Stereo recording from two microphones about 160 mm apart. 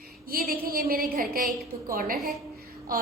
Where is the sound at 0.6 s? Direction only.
65° right (ahead or behind).